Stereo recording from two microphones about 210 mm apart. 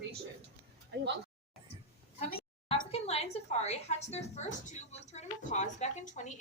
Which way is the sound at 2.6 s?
30° left (ahead or behind).